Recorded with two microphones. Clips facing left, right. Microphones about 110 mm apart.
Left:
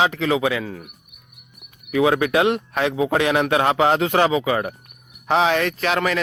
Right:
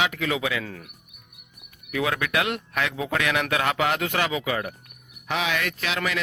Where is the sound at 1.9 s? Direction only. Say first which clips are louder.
Left 8 dB; 25° left (ahead or behind); by 6.2 s 45° left (ahead or behind).